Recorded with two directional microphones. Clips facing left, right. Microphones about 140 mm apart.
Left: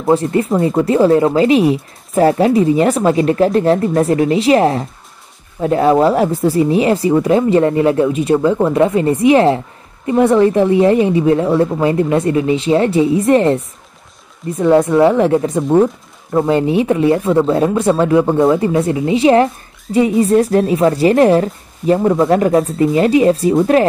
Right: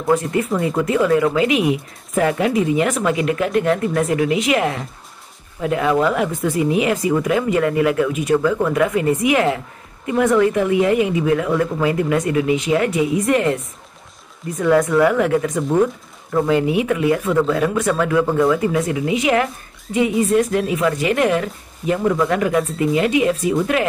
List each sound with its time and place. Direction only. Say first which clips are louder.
0.0 s speech: left 4 dB; 30° left (ahead or behind)
14.6 s speech: left 4 dB; 25° left (ahead or behind)